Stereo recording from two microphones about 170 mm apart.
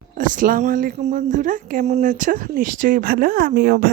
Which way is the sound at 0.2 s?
50° right (ahead or behind).